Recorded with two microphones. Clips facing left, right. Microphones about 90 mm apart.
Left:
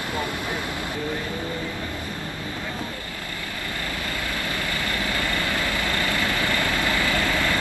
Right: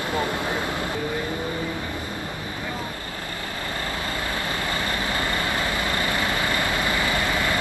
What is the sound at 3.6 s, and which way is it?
Vehicle, 25° right (ahead or behind).